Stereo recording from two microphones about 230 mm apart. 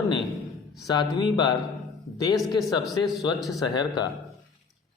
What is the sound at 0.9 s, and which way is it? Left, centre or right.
Speech, centre.